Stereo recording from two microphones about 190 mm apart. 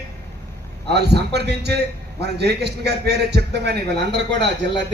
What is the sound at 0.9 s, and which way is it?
A man's voice, 60° right (ahead or behind).